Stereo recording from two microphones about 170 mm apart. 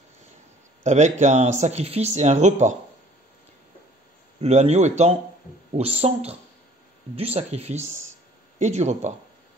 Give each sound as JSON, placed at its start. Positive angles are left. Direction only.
{"t": 0.8, "sound": "speech", "side_deg": -45}
{"t": 4.4, "sound": "speech", "side_deg": -40}